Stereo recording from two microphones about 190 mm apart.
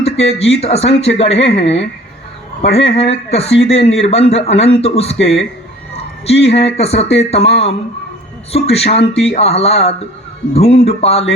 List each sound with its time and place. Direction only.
0.0 s speech: 35° left (ahead or behind)